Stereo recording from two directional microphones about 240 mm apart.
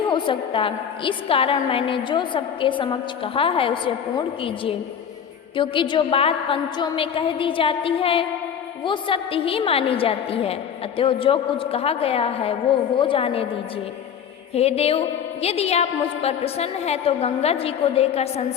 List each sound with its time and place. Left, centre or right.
0.1 s a woman's voice: left
14.5 s a woman's voice: left